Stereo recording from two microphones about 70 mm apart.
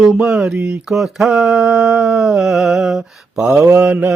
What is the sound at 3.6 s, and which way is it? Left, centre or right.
Mantra, right.